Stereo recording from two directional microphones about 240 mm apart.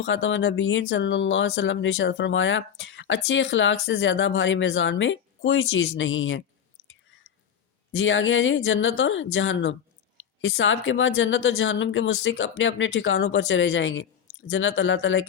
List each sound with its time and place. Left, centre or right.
0.0 s speech: left
7.9 s speech: left